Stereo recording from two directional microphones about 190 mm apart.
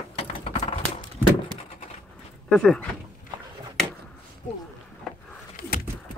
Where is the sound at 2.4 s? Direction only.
5° left (ahead or behind).